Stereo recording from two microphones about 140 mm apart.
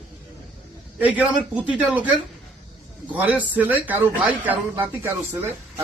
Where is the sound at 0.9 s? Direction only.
10° right (ahead or behind).